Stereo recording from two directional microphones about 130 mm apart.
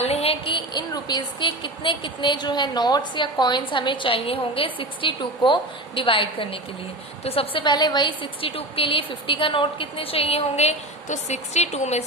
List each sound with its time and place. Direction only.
0.0 s a woman's voice: 50° left (ahead or behind)